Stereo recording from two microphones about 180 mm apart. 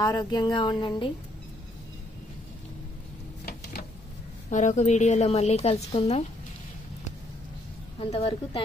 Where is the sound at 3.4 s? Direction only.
60° left (ahead or behind).